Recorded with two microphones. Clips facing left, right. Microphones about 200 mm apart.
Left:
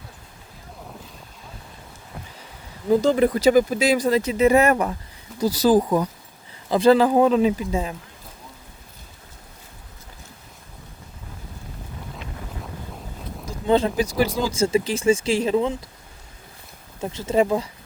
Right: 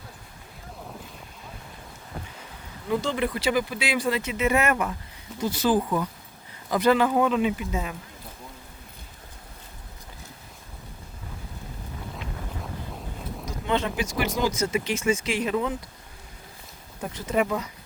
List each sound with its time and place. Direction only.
2.9 s speech: 40° left (ahead or behind)
13.4 s speech: 35° left (ahead or behind)
17.0 s speech: 25° left (ahead or behind)